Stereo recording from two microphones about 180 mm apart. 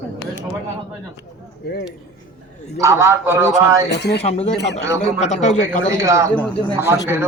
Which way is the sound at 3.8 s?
65° left (ahead or behind).